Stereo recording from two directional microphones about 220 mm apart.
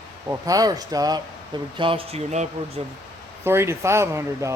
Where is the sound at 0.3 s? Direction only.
15° right (ahead or behind).